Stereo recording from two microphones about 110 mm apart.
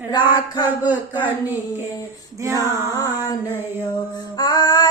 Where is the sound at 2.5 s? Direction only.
30° left (ahead or behind).